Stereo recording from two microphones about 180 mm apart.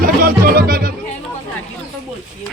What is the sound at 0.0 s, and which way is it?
Music, 55° right (ahead or behind).